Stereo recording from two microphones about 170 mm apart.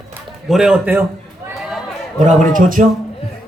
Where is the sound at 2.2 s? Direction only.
50° right (ahead or behind).